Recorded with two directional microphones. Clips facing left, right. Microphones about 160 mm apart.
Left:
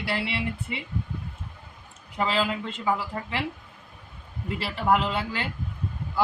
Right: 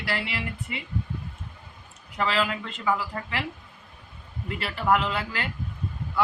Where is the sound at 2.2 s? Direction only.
25° left (ahead or behind).